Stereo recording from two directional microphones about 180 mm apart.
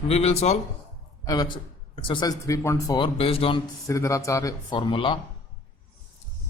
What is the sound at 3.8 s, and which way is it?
Speech, 15° left (ahead or behind).